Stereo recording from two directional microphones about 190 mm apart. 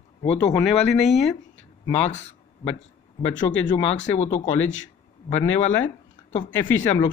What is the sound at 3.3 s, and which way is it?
Speech, 80° left.